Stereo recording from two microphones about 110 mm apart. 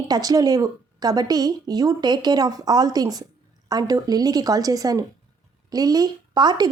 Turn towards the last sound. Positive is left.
turn(degrees=-40)  # may be behind; listen again after turning